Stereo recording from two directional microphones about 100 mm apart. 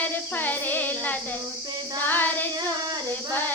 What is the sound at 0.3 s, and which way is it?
Speech, 20° left (ahead or behind).